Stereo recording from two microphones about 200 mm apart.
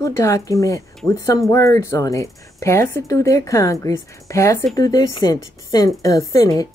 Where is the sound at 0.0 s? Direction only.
15° left (ahead or behind).